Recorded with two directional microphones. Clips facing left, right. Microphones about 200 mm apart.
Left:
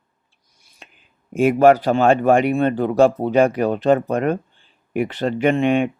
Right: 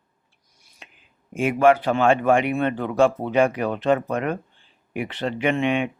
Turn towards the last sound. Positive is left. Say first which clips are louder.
# left 5 dB
turn(degrees=40)  # may be behind; listen again after turning